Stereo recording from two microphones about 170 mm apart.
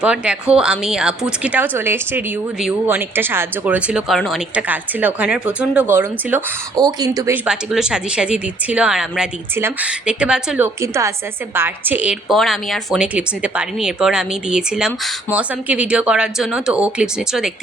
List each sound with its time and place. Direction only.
0.0 s a woman's voice: 5° right (ahead or behind)
6.7 s speech: 25° right (ahead or behind)
7.4 s a woman's voice: 5° right (ahead or behind)
10.8 s a woman's voice: 15° right (ahead or behind)